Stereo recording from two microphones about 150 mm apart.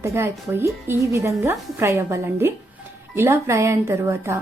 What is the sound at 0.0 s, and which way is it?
A woman's voice, 15° right (ahead or behind).